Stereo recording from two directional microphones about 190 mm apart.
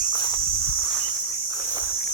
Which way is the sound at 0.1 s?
25° left (ahead or behind).